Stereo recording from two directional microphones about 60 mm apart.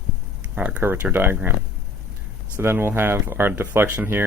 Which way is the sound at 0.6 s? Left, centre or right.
Right.